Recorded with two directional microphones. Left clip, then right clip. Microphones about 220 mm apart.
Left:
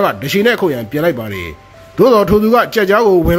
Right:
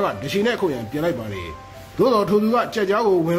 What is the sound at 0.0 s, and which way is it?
Speech, 30° left (ahead or behind).